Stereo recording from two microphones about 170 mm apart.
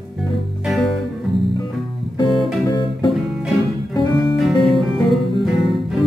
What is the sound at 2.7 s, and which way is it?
Music, 25° left (ahead or behind).